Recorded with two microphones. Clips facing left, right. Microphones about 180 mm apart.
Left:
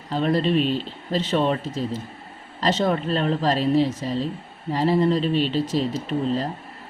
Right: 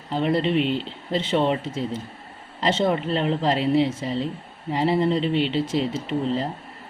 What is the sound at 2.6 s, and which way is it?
Speech, 20° right (ahead or behind).